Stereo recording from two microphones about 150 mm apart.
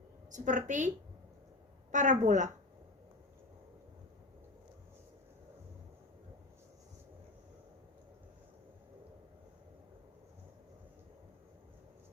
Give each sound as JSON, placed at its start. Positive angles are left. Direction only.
{"t": 0.3, "sound": "a woman's voice", "side_deg": -55}